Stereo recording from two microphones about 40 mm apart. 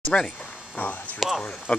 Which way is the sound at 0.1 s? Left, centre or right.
Left.